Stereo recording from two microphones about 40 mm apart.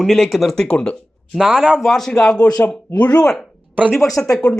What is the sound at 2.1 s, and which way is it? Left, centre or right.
Speech, centre.